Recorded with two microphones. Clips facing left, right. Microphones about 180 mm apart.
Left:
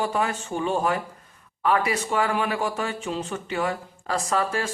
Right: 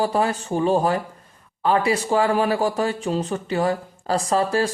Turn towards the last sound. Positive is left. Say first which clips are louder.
# right 5 dB
turn(degrees=-35)  # may be behind; listen again after turning